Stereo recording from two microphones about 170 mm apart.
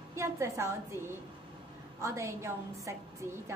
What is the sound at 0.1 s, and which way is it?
A woman's voice, 15° right (ahead or behind).